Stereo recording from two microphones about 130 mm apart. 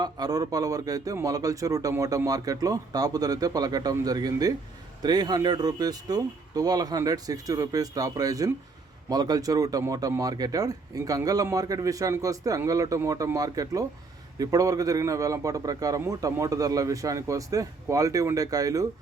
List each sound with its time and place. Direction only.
0.0 s speech: 30° right (ahead or behind)